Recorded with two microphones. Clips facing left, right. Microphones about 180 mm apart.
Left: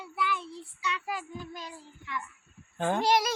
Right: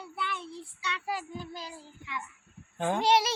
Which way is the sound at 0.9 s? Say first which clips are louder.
Right 3 dB; 30° right (ahead or behind).